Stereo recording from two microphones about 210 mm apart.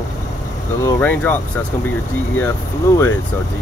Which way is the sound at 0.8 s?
10° left (ahead or behind).